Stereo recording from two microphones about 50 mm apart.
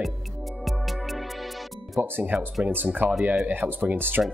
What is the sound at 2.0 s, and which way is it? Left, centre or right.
Speech, right.